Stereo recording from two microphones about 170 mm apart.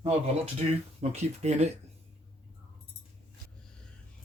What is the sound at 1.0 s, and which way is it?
Speech, 40° right (ahead or behind).